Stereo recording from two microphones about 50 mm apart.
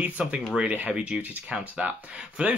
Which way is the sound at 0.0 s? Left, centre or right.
Right.